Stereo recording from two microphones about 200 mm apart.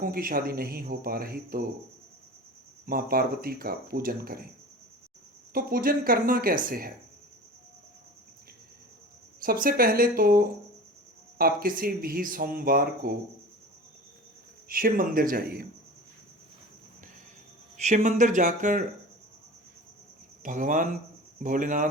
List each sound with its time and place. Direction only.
0.0 s speech: 45° right (ahead or behind)
2.8 s speech: 45° right (ahead or behind)
5.5 s speech: 45° right (ahead or behind)
9.4 s speech: 45° right (ahead or behind)
14.7 s speech: 45° right (ahead or behind)
17.7 s speech: 35° right (ahead or behind)
20.4 s speech: 40° right (ahead or behind)